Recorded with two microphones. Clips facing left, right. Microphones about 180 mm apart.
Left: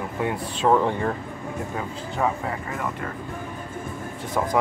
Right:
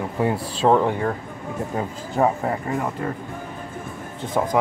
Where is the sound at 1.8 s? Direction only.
40° right (ahead or behind).